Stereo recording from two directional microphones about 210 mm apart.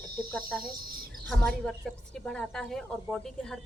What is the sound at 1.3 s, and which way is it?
A woman's voice, 5° left (ahead or behind).